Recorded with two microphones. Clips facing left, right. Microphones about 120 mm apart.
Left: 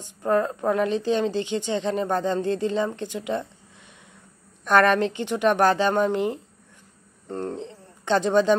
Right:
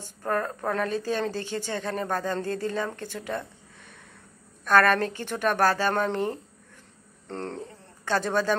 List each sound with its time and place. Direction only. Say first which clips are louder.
0.2 s a woman's voice: left 6 dB; 20° left (ahead or behind)
4.6 s a woman's voice: left 2 dB; 20° left (ahead or behind)
7.6 s speech: left 5 dB; 25° left (ahead or behind)